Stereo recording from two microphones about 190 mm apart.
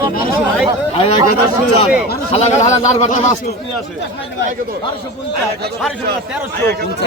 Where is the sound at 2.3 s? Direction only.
35° left (ahead or behind).